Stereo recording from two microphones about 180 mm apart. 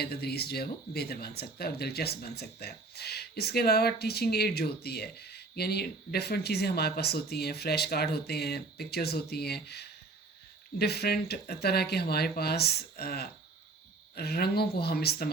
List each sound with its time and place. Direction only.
0.0 s speech: 60° left (ahead or behind)